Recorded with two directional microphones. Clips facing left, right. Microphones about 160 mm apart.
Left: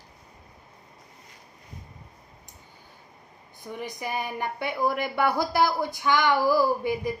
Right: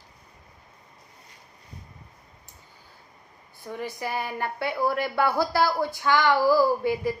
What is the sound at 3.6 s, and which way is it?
A woman's voice, 15° left (ahead or behind).